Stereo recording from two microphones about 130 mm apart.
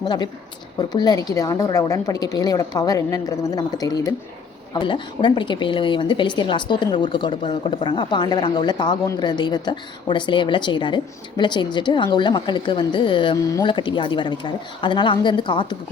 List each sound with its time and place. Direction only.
0.0 s a woman's voice: 30° left (ahead or behind)